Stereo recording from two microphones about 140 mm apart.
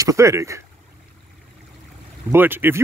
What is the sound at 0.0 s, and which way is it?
Speech, 20° right (ahead or behind).